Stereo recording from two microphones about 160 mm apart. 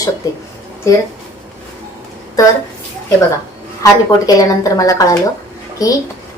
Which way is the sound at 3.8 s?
20° left (ahead or behind).